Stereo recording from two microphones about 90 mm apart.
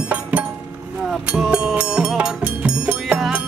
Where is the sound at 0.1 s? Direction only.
15° right (ahead or behind).